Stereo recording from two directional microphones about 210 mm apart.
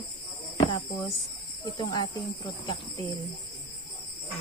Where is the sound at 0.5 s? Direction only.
20° left (ahead or behind).